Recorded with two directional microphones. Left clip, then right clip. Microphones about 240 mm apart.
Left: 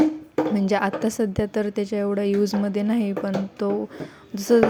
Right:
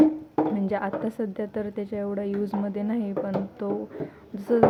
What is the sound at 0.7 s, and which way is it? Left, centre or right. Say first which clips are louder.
A woman's voice: left 5 dB; left.